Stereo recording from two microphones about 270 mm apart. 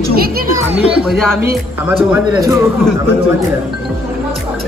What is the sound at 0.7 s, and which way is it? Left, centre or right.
Speech, right.